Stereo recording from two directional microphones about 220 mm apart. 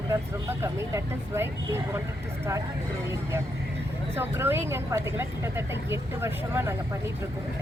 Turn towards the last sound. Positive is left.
turn(degrees=-10)  # may be behind; listen again after turning